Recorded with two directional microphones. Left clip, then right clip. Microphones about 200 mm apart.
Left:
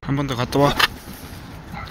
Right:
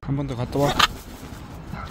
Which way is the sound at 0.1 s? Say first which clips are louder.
Left 6 dB; centre (ahead or behind).